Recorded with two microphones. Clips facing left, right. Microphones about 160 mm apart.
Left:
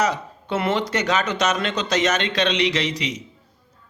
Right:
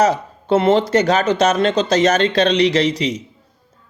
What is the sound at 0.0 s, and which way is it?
Speech, 30° right (ahead or behind).